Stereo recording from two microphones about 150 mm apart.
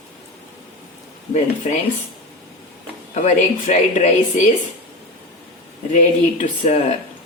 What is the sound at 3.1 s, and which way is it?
Speech, 50° left (ahead or behind).